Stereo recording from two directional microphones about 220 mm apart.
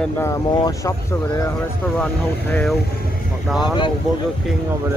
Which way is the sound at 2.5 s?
5° left (ahead or behind).